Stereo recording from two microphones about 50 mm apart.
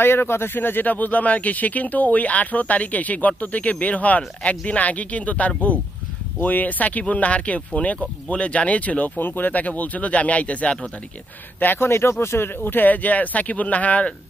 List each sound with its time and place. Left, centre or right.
0.0 s speech: left
9.2 s speech: left
11.6 s speech: left